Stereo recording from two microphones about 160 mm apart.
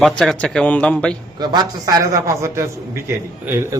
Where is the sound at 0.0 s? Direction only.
Centre (ahead or behind).